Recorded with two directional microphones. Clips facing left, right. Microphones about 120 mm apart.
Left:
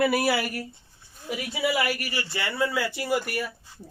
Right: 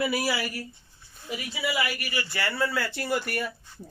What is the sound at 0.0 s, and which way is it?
Speech, 55° left (ahead or behind).